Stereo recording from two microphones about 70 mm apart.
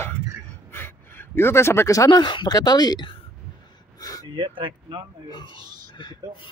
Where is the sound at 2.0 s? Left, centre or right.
Left.